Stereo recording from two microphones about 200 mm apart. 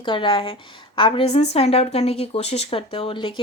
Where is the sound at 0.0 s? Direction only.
25° left (ahead or behind).